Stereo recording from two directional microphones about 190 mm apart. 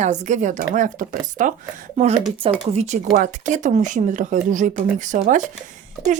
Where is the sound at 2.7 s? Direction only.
35° right (ahead or behind).